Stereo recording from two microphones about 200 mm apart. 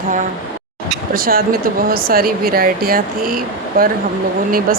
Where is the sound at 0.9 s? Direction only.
45° right (ahead or behind).